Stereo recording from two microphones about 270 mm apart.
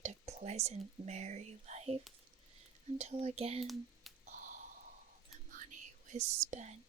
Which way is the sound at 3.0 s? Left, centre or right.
Right.